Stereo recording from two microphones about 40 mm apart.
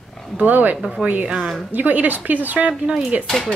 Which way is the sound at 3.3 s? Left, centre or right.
Centre.